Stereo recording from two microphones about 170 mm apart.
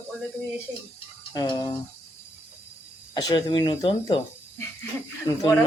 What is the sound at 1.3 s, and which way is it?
Speech, 25° left (ahead or behind).